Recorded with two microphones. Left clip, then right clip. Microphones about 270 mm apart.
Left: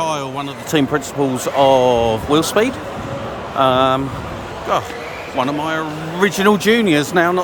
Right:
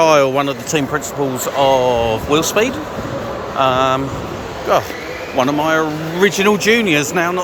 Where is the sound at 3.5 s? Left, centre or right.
Left.